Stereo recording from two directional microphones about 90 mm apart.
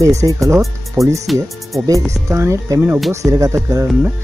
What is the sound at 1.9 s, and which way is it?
Speech, 35° right (ahead or behind).